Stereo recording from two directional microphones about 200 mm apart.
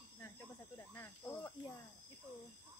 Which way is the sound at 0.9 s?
15° left (ahead or behind).